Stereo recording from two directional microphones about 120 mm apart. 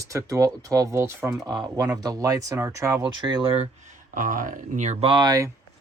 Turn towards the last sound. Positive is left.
turn(degrees=-30)  # may be behind; listen again after turning